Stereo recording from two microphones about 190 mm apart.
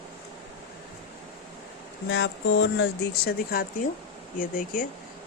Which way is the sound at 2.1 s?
75° left (ahead or behind).